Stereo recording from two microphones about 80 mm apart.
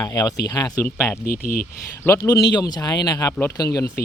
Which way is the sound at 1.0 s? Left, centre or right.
Left.